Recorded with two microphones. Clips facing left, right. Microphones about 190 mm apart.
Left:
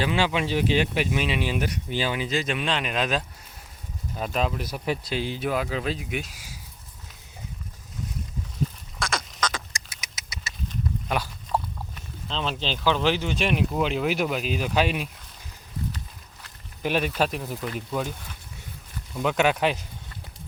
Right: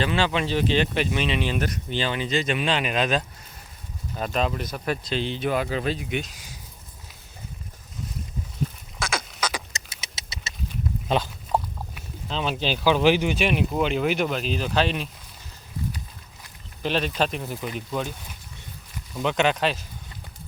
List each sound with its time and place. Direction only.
0.0 s speech: 10° left (ahead or behind)
9.0 s duck: centre (ahead or behind)
9.5 s vehicle: 20° right (ahead or behind)
11.1 s a sound: 20° right (ahead or behind)
11.9 s speech: 10° right (ahead or behind)
13.3 s speech: centre (ahead or behind)
16.8 s speech: 10° left (ahead or behind)
19.1 s speech: 5° left (ahead or behind)